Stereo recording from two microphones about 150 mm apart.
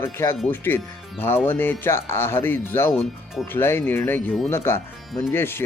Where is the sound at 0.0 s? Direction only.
15° left (ahead or behind).